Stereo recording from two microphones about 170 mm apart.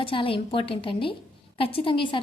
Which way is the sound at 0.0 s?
30° left (ahead or behind).